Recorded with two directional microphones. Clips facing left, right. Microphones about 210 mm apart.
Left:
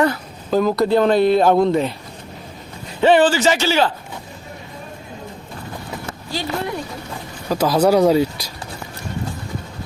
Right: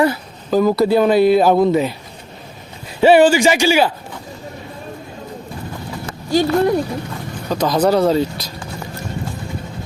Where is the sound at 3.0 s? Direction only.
10° right (ahead or behind).